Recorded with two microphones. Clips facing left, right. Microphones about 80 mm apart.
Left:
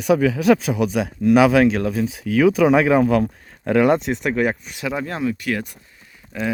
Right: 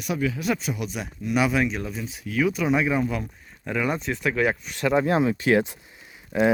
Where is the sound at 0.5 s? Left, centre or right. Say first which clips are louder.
Left 10 dB; left.